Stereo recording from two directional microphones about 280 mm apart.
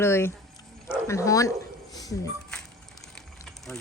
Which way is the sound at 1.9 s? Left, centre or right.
Centre.